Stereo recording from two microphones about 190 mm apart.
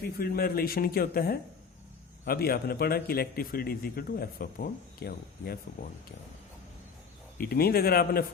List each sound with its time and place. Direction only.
0.2 s speech: 50° left (ahead or behind)
7.3 s speech: 55° left (ahead or behind)